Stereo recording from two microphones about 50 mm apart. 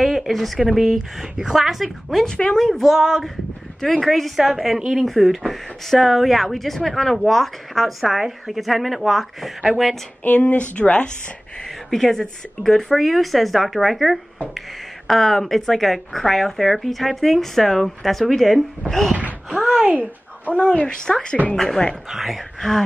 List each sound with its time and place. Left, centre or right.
0.0 s speech: centre
2.2 s speech: centre
2.6 s speech: centre
3.0 s speech: centre
3.8 s speech: centre
10.2 s speech: left
11.9 s speech: centre
19.1 s wail: right
19.8 s speech: right
20.4 s speech: left
22.1 s speech: centre
22.6 s speech: centre